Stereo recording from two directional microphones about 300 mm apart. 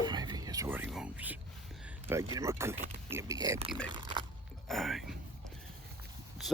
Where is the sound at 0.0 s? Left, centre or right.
Centre.